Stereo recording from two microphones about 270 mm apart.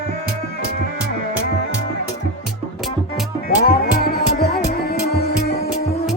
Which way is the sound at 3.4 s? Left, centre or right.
Left.